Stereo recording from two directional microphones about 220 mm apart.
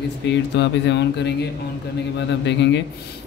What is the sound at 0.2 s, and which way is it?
A man's voice, 50° left (ahead or behind).